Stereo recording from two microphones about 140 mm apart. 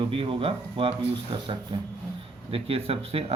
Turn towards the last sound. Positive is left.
turn(degrees=-45)  # may be behind; listen again after turning